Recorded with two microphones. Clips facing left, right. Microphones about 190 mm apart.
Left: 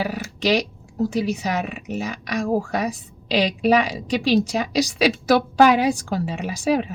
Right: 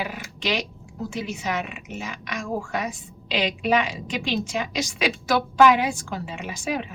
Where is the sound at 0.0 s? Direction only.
35° left (ahead or behind).